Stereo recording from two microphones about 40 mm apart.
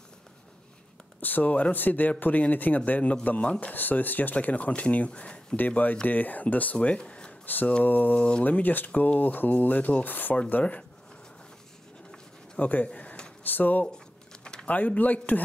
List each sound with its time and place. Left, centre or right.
1.2 s speech: left
3.7 s speech: left
5.7 s speech: left
7.8 s speech: left
8.2 s speech: left
8.5 s speech: left
10.6 s speech: left
12.5 s speech: left
12.8 s a sound: left
13.4 s speech: left
13.8 s typing: centre
14.7 s speech: left